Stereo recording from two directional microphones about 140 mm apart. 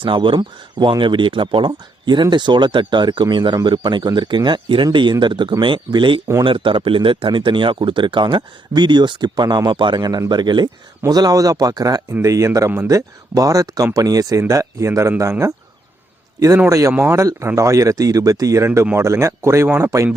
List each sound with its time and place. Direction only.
0.0 s speech: 35° right (ahead or behind); by 15.5 s 20° right (ahead or behind)
16.6 s speech: 20° right (ahead or behind)